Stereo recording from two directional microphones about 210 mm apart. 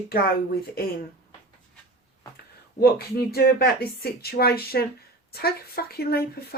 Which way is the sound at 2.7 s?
50° left (ahead or behind).